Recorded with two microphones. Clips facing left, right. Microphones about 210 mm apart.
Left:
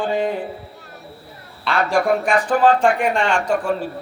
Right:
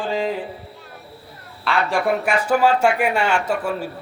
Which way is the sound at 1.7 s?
Centre (ahead or behind).